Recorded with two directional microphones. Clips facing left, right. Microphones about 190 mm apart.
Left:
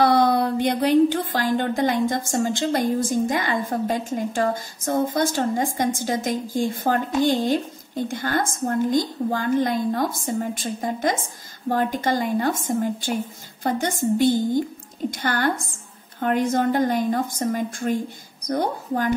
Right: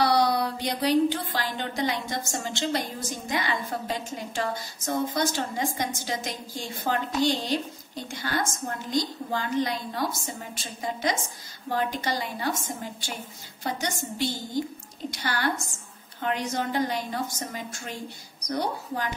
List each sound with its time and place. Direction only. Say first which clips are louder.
0.0 s speech: left 5 dB; 50° left (ahead or behind)